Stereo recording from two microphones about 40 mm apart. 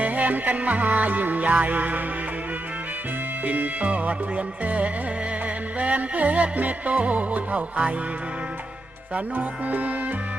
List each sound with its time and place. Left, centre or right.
0.0 s music: right
3.4 s music: right
9.3 s music: right